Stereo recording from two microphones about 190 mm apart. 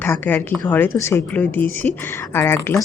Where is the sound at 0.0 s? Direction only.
10° left (ahead or behind).